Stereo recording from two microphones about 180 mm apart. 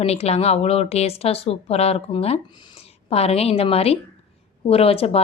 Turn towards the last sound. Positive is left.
turn(degrees=35)  # may be behind; listen again after turning